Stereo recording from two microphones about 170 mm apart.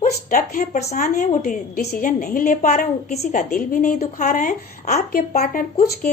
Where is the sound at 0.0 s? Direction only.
50° left (ahead or behind).